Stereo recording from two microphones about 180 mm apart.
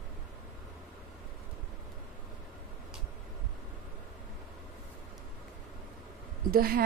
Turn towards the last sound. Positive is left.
turn(degrees=-55)  # may be behind; listen again after turning